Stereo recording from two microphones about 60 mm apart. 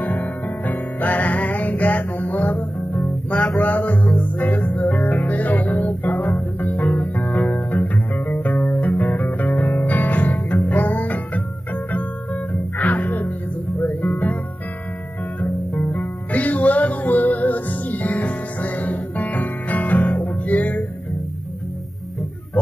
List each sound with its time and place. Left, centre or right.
0.0 s music: left
13.7 s guitar: left
15.4 s music: left